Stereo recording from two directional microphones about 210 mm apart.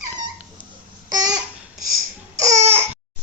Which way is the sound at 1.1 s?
20° right (ahead or behind).